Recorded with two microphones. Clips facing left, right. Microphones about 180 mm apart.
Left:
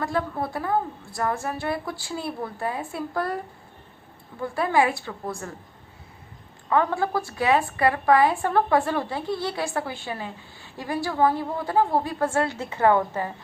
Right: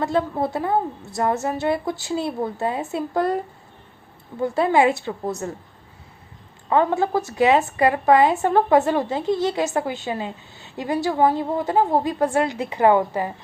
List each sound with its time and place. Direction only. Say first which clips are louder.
0.0 s a woman's voice: right 5 dB; 20° right (ahead or behind)
6.7 s a woman's voice: right 4 dB; 25° right (ahead or behind)